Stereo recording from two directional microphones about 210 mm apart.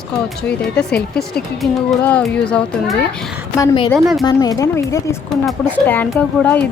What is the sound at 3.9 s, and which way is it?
Speech, centre (ahead or behind).